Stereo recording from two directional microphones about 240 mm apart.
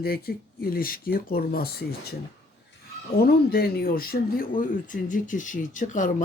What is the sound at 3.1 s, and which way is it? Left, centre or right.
Speech, left.